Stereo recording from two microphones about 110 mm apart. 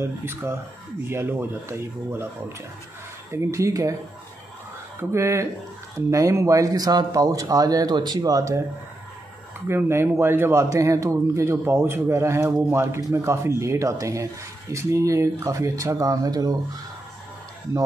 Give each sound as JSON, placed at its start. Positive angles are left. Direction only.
{"t": 0.0, "sound": "speech", "side_deg": -20}
{"t": 3.3, "sound": "speech", "side_deg": -25}
{"t": 5.1, "sound": "speech", "side_deg": -25}
{"t": 9.7, "sound": "speech", "side_deg": -20}